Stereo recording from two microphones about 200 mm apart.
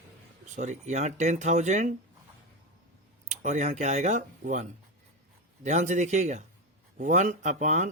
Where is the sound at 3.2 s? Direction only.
35° right (ahead or behind).